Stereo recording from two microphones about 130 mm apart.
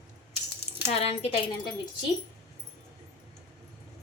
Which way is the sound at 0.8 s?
50° left (ahead or behind).